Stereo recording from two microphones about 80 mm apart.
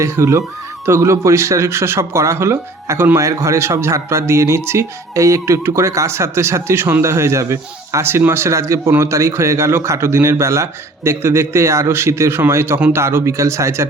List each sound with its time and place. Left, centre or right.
0.0 s a man's voice: right